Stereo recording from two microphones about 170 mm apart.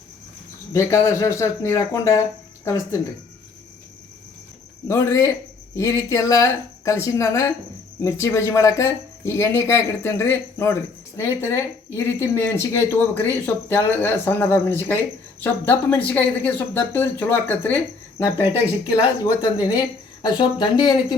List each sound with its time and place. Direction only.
0.7 s speech: 15° left (ahead or behind)
4.9 s speech: 15° left (ahead or behind)
18.9 s speech: 20° left (ahead or behind)